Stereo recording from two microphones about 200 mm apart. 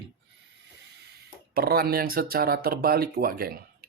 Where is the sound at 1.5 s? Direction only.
50° right (ahead or behind).